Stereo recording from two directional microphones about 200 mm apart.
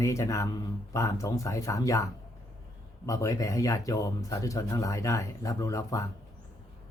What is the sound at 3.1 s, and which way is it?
Speech, 15° left (ahead or behind).